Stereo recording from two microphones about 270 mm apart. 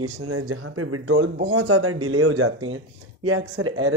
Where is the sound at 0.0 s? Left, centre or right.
Right.